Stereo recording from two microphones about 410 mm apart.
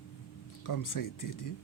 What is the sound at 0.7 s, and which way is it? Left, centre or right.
Speech, left.